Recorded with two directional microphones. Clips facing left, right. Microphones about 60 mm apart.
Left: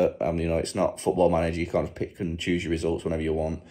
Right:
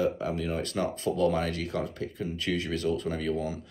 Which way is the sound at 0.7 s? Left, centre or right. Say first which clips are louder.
Left 5 dB; left.